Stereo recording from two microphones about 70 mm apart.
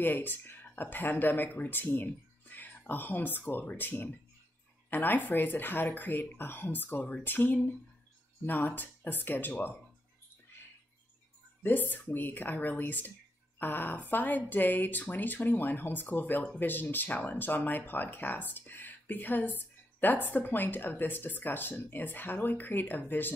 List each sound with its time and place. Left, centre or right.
0.0 s a woman's voice: left
11.6 s a woman's voice: left